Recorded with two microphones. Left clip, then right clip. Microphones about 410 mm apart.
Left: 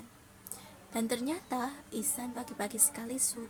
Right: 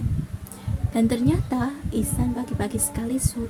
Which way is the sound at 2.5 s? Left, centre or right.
Left.